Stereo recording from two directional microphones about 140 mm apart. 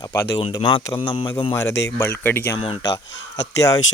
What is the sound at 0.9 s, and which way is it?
Speech, 20° left (ahead or behind).